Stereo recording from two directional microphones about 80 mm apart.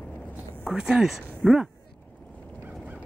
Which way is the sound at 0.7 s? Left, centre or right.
Centre.